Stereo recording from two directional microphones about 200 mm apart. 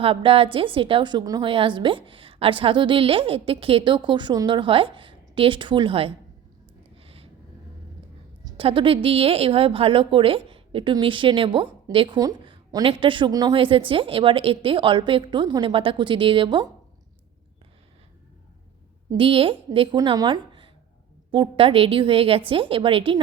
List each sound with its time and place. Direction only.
0.0 s a woman's voice: 25° right (ahead or behind)
6.9 s a sound: 30° right (ahead or behind)
8.4 s a woman's voice: 25° right (ahead or behind)
19.1 s a woman's voice: 25° right (ahead or behind)